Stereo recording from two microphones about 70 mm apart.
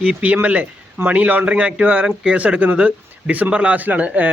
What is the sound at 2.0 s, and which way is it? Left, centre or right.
Speech, centre.